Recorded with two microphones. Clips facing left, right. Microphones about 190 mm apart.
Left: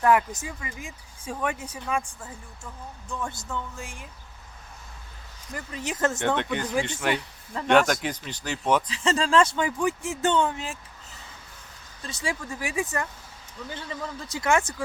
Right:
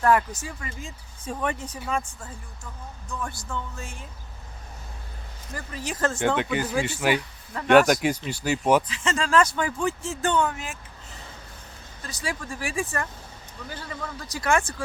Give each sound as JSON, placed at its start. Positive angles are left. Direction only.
{"t": 0.0, "sound": "speech", "side_deg": 15}
{"t": 3.1, "sound": "speech", "side_deg": 25}
{"t": 5.5, "sound": "speech", "side_deg": 20}
{"t": 6.1, "sound": "speech", "side_deg": 0}
{"t": 8.9, "sound": "speech", "side_deg": 35}
{"t": 12.0, "sound": "speech", "side_deg": 25}